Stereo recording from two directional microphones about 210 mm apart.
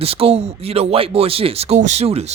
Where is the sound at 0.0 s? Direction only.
30° right (ahead or behind).